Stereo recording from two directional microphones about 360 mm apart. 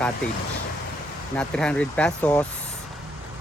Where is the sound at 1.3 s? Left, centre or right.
Centre.